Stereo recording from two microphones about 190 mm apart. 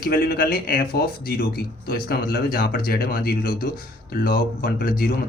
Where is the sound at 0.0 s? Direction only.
50° left (ahead or behind).